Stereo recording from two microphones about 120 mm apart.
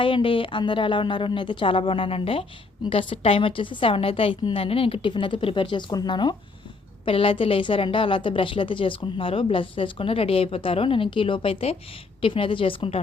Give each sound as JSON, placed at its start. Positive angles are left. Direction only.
{"t": 0.0, "sound": "a woman's voice", "side_deg": 45}
{"t": 7.0, "sound": "a woman's voice", "side_deg": 50}